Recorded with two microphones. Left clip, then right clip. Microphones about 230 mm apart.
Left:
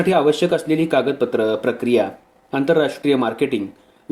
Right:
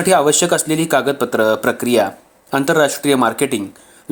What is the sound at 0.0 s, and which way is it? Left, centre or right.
Speech, right.